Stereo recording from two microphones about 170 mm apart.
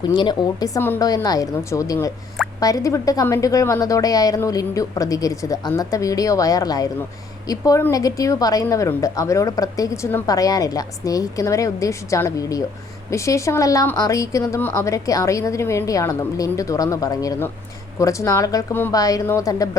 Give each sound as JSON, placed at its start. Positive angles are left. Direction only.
{"t": 0.1, "sound": "a woman's voice", "side_deg": 25}